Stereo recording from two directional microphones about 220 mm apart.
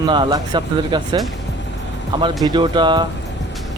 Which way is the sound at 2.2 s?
20° right (ahead or behind).